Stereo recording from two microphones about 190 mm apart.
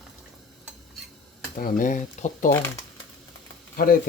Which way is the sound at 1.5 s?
45° left (ahead or behind).